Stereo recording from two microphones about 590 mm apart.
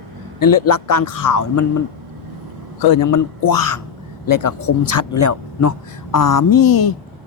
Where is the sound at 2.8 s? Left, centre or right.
Left.